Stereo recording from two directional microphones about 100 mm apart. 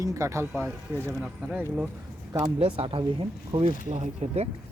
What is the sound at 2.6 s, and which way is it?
Speech, 65° right (ahead or behind).